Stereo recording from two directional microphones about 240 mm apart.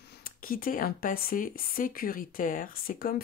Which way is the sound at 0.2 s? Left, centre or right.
Left.